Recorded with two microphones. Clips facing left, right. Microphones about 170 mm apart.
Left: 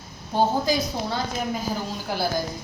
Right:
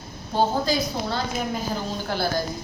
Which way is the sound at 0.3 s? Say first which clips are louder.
Even; 15° left (ahead or behind).